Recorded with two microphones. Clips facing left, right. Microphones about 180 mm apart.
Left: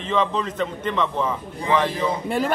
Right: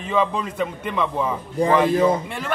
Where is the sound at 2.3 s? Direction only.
35° left (ahead or behind).